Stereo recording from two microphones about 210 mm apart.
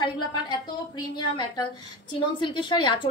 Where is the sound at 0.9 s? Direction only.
20° left (ahead or behind).